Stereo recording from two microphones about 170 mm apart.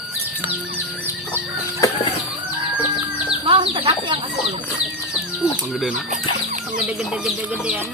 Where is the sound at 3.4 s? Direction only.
30° right (ahead or behind).